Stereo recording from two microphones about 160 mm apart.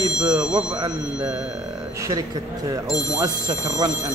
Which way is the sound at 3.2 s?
20° right (ahead or behind).